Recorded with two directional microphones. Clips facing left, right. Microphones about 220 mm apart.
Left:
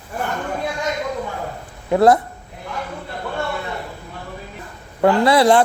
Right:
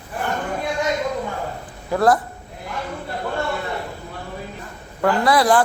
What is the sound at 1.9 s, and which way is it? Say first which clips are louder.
Speech: left 4 dB; 25° left (ahead or behind).